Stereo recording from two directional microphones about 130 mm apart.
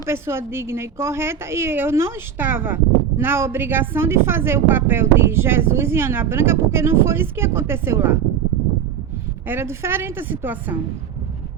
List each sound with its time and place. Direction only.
0.0 s a woman's voice: 20° right (ahead or behind)
9.5 s a woman's voice: 20° right (ahead or behind)